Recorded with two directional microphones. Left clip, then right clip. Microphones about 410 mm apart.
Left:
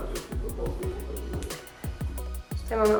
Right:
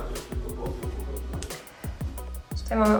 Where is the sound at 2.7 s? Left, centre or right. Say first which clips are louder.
Even; centre.